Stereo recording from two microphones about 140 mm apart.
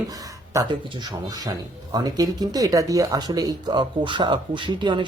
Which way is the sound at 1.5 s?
25° right (ahead or behind).